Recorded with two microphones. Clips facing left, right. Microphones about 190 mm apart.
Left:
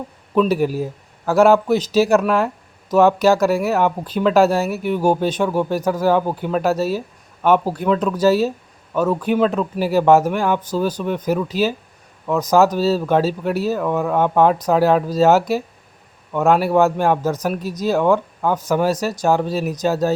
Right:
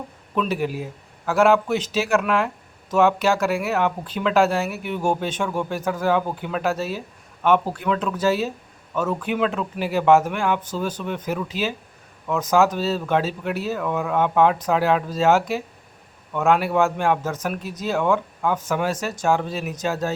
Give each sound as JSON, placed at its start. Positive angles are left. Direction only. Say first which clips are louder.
{"t": 0.3, "sound": "speech", "louder": "left 7 dB", "side_deg": 40}